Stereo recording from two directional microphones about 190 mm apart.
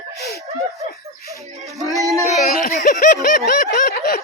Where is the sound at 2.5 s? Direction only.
45° left (ahead or behind).